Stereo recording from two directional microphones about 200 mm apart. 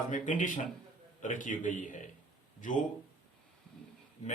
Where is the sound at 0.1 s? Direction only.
40° left (ahead or behind).